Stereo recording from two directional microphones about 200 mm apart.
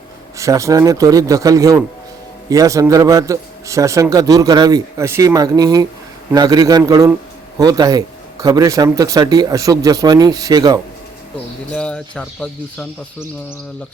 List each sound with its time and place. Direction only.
0.3 s a man's voice: 15° right (ahead or behind)
11.7 s speech: 5° left (ahead or behind)